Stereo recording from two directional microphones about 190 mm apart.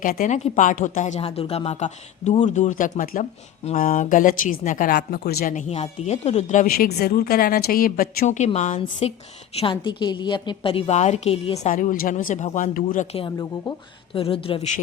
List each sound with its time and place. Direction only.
0.0 s a woman's voice: 45° left (ahead or behind)
8.4 s a woman's voice: 35° left (ahead or behind)
13.1 s a woman's voice: 20° left (ahead or behind)